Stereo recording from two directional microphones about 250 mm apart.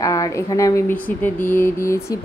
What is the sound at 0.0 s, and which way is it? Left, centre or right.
Speech, centre.